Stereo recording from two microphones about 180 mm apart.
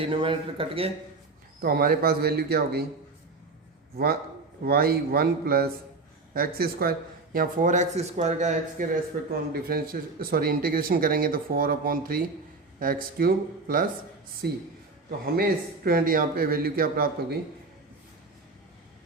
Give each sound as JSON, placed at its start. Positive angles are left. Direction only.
{"t": 0.0, "sound": "speech", "side_deg": -30}
{"t": 1.6, "sound": "a man's voice", "side_deg": -55}
{"t": 3.9, "sound": "a man's voice", "side_deg": -60}
{"t": 9.5, "sound": "a man's voice", "side_deg": -55}